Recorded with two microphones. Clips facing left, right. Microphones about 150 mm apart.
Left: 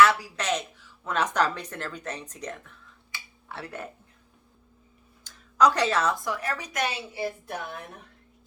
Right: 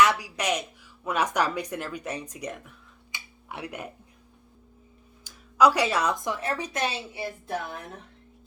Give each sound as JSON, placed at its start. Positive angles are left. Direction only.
{"t": 0.0, "sound": "a woman's voice", "side_deg": -15}
{"t": 5.2, "sound": "speech", "side_deg": -10}